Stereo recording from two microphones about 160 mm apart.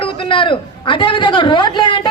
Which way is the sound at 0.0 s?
35° left (ahead or behind).